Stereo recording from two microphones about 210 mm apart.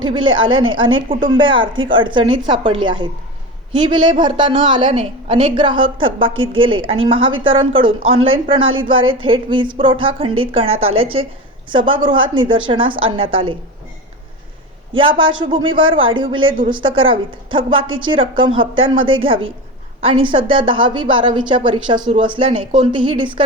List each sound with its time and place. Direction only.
0.0 s a woman's voice: 20° right (ahead or behind)
0.8 s speech: 70° right (ahead or behind)
1.4 s a woman's voice: 25° right (ahead or behind)
8.6 s speech: 70° right (ahead or behind)
8.9 s a woman's voice: 25° right (ahead or behind)
15.4 s a woman's voice: 20° right (ahead or behind)